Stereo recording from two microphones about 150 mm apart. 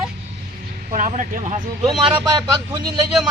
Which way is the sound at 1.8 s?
30° right (ahead or behind).